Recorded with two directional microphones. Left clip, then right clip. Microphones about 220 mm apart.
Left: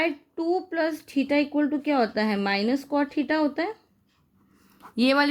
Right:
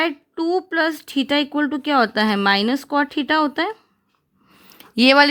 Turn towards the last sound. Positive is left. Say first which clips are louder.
# right 9 dB
turn(degrees=-40)  # may be behind; listen again after turning